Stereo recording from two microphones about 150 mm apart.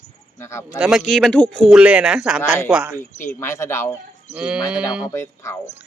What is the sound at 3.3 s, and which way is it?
Speech, 20° left (ahead or behind).